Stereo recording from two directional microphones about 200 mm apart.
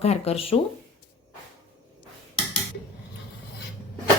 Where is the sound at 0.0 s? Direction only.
30° left (ahead or behind).